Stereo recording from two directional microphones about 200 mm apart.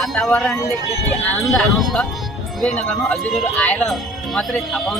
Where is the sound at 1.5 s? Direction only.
Centre (ahead or behind).